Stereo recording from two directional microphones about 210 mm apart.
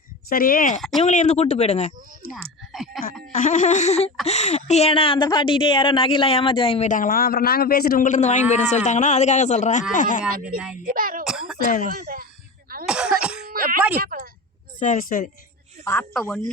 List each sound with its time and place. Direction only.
0.3 s speech: 45° left (ahead or behind)
0.8 s speech: centre (ahead or behind)
1.0 s a woman's voice: 35° left (ahead or behind)
2.3 s speech: centre (ahead or behind)
3.3 s a woman's voice: 35° left (ahead or behind)
10.8 s speech: 40° right (ahead or behind)
11.3 s a sound: centre (ahead or behind)
11.9 s speech: 45° right (ahead or behind)
12.8 s cough: 5° right (ahead or behind)
13.5 s a sound: 45° right (ahead or behind)
13.9 s speech: 45° right (ahead or behind)
14.8 s a woman's voice: 35° left (ahead or behind)
15.8 s a woman's voice: 10° left (ahead or behind)